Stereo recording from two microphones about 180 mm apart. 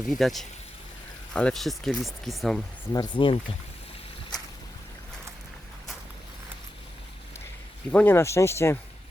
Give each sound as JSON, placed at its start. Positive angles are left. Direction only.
{"t": 0.0, "sound": "speech", "side_deg": 0}
{"t": 2.9, "sound": "speech", "side_deg": 25}
{"t": 7.9, "sound": "speech", "side_deg": 10}